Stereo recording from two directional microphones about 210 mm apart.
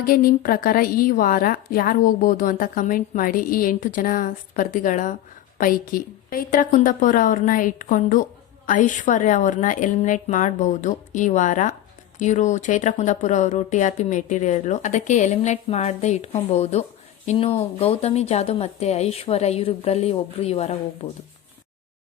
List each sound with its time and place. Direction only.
0.0 s a woman's voice: 45° left (ahead or behind)